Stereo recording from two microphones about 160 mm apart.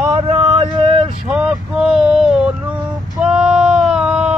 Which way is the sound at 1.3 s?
5° right (ahead or behind).